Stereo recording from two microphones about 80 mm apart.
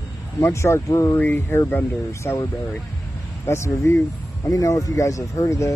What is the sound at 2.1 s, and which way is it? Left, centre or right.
Speech, left.